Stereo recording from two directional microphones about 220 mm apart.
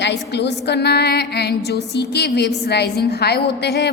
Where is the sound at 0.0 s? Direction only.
50° left (ahead or behind).